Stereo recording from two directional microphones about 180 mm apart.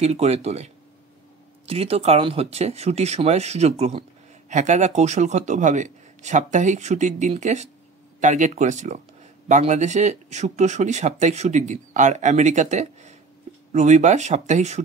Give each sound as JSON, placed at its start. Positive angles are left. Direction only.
{"t": 0.0, "sound": "speech", "side_deg": -35}
{"t": 1.7, "sound": "speech", "side_deg": -35}